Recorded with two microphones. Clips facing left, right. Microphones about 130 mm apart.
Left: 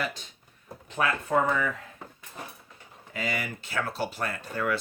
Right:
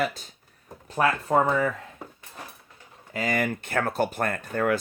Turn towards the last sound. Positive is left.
turn(degrees=-50)  # may be behind; listen again after turning